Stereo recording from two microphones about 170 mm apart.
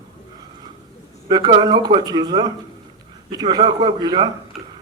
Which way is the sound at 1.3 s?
25° right (ahead or behind).